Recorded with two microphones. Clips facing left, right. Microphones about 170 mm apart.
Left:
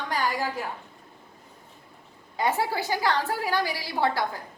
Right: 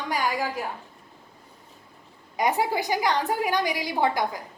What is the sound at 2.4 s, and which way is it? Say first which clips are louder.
A woman's voice: right 2 dB; 15° right (ahead or behind).